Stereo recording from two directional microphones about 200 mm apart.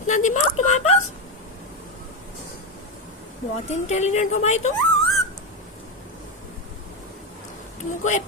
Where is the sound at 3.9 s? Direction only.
35° left (ahead or behind).